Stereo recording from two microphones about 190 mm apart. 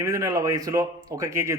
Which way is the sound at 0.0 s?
15° right (ahead or behind).